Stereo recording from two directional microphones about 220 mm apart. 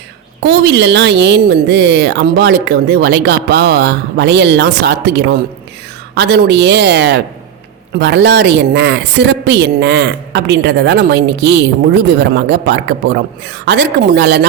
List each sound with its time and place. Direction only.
0.4 s a woman's voice: 50° right (ahead or behind)